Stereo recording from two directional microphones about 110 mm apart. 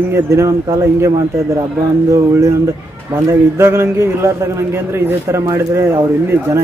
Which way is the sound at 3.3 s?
25° right (ahead or behind).